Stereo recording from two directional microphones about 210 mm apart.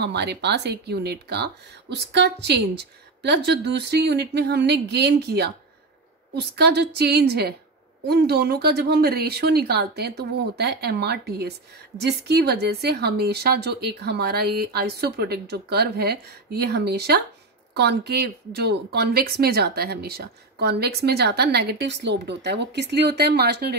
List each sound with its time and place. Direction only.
0.0 s speech: 55° right (ahead or behind)